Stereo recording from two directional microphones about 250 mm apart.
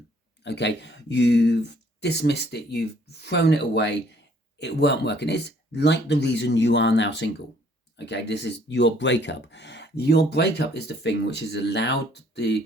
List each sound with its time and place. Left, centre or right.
0.4 s speech: left